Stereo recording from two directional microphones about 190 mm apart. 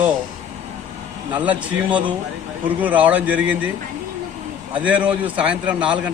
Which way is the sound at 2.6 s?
10° right (ahead or behind).